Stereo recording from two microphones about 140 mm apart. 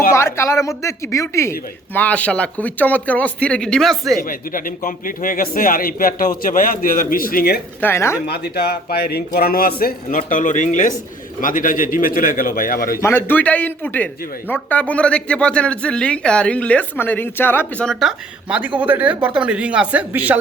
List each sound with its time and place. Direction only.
0.1 s speech: 20° left (ahead or behind); by 4.1 s centre (ahead or behind)
4.2 s a man's voice: 80° left
7.8 s speech: 15° left (ahead or behind)
8.5 s a man's voice: 90° left
13.0 s speech: 15° left (ahead or behind)
18.0 s speech: 10° right (ahead or behind)